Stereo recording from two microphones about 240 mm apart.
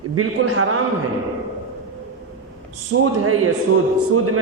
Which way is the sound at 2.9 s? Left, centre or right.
Right.